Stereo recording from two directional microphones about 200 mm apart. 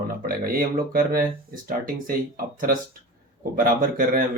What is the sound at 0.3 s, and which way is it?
Speech, 45° right (ahead or behind).